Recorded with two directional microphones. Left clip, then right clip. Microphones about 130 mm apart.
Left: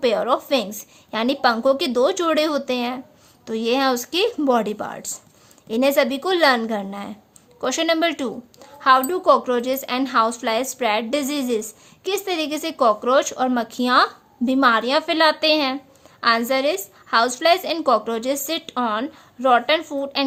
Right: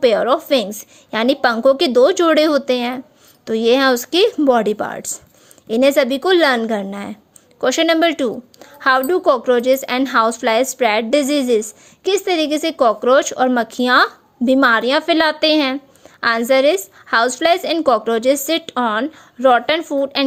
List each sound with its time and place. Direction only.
0.0 s a woman's voice: 40° right (ahead or behind)